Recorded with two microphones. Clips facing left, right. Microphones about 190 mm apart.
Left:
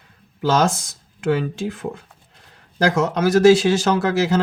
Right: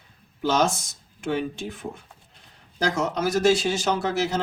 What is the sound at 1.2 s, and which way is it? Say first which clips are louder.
Speech: left 6 dB; 90° left.